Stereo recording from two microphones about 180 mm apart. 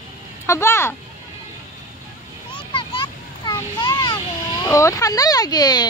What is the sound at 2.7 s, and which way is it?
Vehicle, 30° left (ahead or behind).